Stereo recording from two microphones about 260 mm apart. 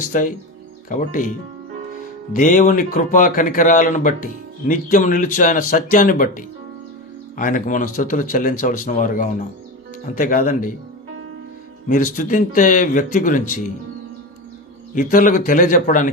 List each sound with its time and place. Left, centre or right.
0.1 s speech: left
2.3 s speech: left
11.9 s speech: left
14.9 s speech: left